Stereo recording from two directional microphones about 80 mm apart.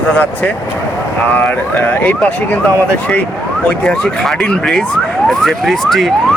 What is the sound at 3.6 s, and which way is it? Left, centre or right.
Speech, centre.